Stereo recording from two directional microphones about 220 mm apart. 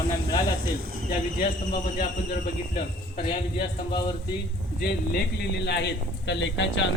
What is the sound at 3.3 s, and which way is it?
Speech, 20° left (ahead or behind).